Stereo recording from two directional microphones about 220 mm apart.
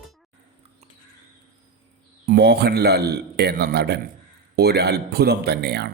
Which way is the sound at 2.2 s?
45° right (ahead or behind).